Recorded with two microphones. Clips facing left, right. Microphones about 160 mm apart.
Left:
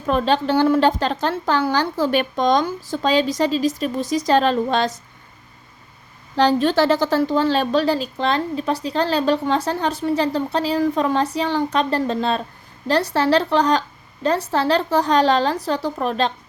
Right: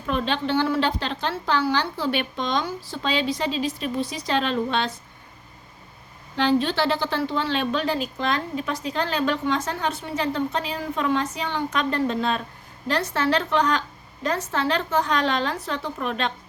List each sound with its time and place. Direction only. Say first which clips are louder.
0.0 s a woman's voice: left 6 dB; 40° left (ahead or behind)
6.3 s a woman's voice: left 5 dB; 40° left (ahead or behind)